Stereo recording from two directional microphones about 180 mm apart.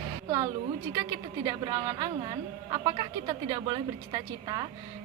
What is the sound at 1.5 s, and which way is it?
A woman's voice, 20° right (ahead or behind).